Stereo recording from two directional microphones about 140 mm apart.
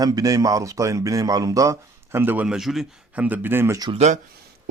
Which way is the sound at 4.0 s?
55° right (ahead or behind).